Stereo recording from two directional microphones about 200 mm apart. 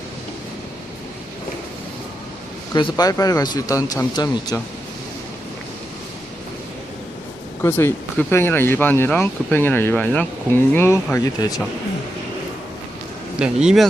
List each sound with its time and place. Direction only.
2.7 s speech: 20° left (ahead or behind)
7.6 s speech: 10° left (ahead or behind)
13.4 s speech: 5° right (ahead or behind)